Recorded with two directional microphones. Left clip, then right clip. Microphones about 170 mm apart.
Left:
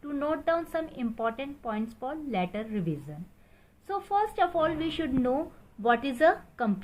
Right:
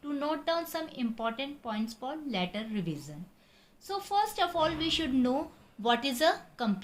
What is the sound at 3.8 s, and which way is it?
A woman's voice, 60° left (ahead or behind).